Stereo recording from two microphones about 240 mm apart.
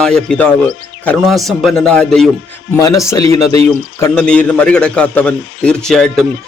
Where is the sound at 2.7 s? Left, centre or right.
Centre.